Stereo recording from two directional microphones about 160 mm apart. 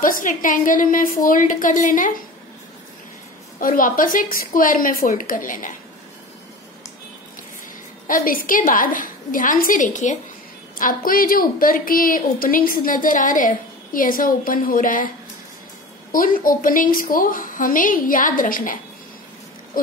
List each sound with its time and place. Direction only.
0.0 s a woman's voice: 55° left (ahead or behind)
3.5 s a woman's voice: 60° left (ahead or behind)
8.1 s a woman's voice: 60° left (ahead or behind)
16.1 s a woman's voice: 60° left (ahead or behind)